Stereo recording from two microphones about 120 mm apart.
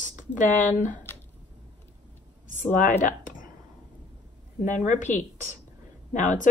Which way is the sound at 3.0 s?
90° left.